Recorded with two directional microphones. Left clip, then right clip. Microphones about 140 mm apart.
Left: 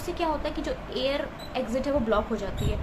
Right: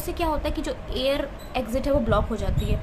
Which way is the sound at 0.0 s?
35° right (ahead or behind).